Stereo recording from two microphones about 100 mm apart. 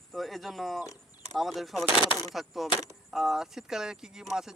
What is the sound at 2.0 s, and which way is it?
Speech, 50° left (ahead or behind).